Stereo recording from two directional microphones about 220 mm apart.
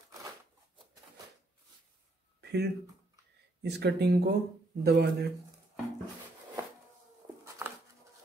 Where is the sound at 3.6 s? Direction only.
50° right (ahead or behind).